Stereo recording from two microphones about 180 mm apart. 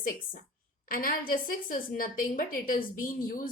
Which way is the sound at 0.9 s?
50° left (ahead or behind).